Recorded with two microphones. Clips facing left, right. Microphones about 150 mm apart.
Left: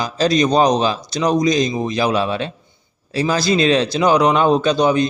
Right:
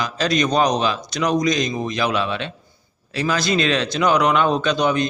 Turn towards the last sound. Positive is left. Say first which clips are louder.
# left 4 dB
turn(degrees=35)  # may be behind; listen again after turning